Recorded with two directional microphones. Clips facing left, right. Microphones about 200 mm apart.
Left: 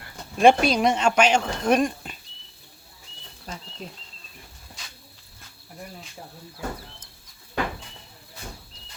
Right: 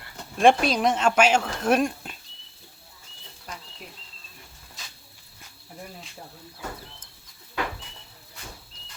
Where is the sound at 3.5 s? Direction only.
25° left (ahead or behind).